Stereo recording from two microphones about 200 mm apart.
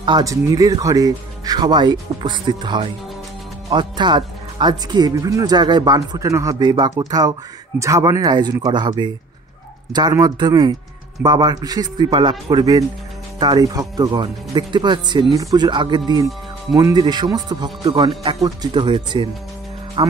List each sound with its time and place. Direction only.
0.0 s speech: 20° right (ahead or behind)